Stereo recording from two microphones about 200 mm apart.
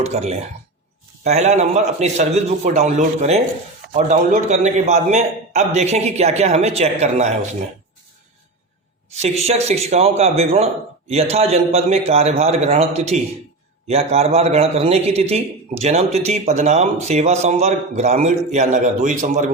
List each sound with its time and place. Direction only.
0.0 s a man's voice: 30° right (ahead or behind)
9.1 s a man's voice: 30° right (ahead or behind)